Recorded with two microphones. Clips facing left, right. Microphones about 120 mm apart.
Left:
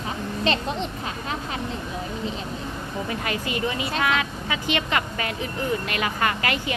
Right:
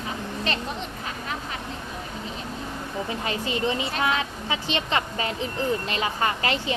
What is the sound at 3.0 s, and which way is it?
Speech, 25° right (ahead or behind).